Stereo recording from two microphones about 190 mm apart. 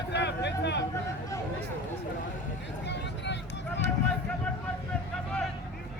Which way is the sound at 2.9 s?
65° left (ahead or behind).